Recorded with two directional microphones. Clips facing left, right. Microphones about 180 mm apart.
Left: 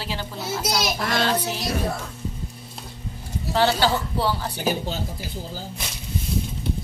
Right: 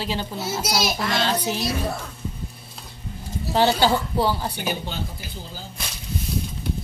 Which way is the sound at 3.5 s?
15° right (ahead or behind).